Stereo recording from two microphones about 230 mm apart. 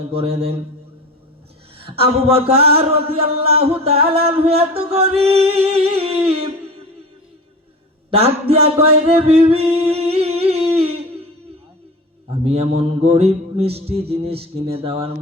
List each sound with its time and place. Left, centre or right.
0.1 s mantra: right
1.8 s mantra: right
8.1 s a sound: right
12.5 s mantra: right